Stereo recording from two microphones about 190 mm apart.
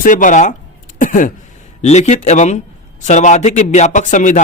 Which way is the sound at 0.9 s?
45° left (ahead or behind).